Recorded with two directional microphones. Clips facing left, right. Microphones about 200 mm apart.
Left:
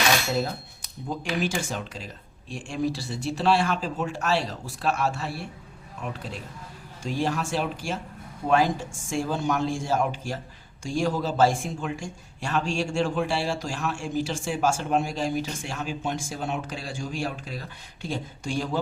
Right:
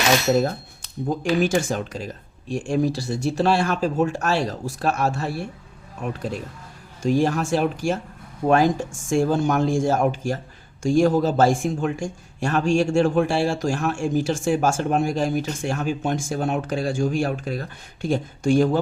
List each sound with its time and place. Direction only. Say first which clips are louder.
1.0 s speech: right 7 dB; 45° right (ahead or behind)